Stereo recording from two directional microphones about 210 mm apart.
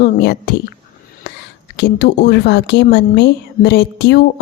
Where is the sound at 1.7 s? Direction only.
50° left (ahead or behind).